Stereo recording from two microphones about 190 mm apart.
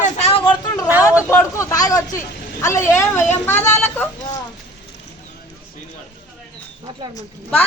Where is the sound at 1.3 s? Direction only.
15° left (ahead or behind).